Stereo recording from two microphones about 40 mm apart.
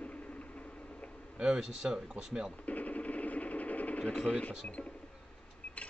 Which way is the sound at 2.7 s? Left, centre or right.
Left.